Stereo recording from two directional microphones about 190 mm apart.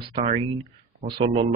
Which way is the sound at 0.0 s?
30° right (ahead or behind).